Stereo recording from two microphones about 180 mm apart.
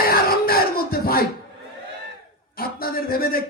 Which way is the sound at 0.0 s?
55° left (ahead or behind).